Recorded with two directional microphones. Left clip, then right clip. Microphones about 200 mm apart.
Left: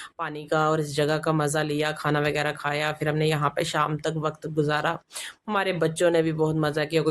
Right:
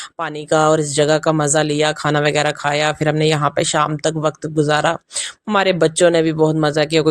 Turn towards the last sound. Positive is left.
turn(degrees=-40)  # may be behind; listen again after turning